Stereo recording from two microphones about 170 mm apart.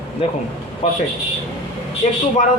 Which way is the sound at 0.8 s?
40° left (ahead or behind).